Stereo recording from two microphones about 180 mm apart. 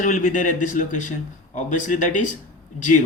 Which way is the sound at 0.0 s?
50° left (ahead or behind).